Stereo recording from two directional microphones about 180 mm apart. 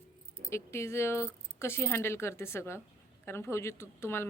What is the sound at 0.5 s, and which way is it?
Speech, 15° left (ahead or behind).